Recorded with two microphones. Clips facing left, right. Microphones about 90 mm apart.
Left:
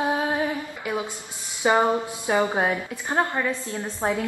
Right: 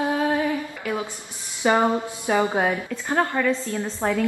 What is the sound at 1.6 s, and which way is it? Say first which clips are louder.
A woman's voice: even; 20° left (ahead or behind).